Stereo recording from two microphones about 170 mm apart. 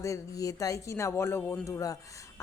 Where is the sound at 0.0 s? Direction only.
20° left (ahead or behind).